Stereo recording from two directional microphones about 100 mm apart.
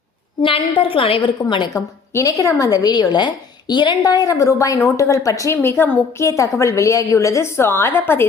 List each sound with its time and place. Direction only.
0.4 s a woman's voice: 60° left (ahead or behind)
2.1 s a woman's voice: 35° left (ahead or behind)